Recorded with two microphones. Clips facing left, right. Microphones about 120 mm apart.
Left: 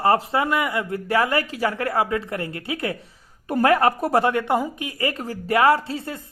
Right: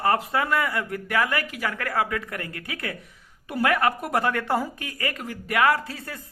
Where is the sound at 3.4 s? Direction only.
40° left (ahead or behind).